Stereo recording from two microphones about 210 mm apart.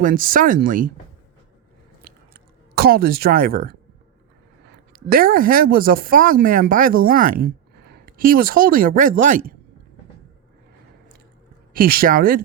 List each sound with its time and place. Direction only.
0.0 s speech: 40° right (ahead or behind)
2.3 s speech: 45° right (ahead or behind)
4.9 s speech: 45° right (ahead or behind)
11.7 s speech: 45° right (ahead or behind)